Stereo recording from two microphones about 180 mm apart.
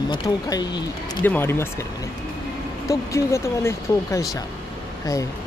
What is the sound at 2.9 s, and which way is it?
Speech, 15° left (ahead or behind).